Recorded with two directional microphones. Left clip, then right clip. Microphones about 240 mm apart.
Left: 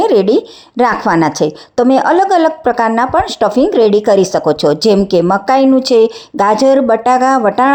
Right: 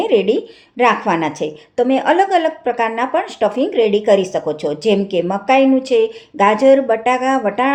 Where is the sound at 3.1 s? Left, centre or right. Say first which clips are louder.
Left 5 dB; left.